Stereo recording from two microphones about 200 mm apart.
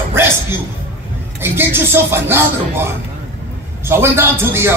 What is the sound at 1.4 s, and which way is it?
Speech, 10° right (ahead or behind).